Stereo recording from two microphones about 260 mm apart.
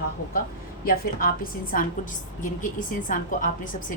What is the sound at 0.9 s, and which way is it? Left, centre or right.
A woman's voice, left.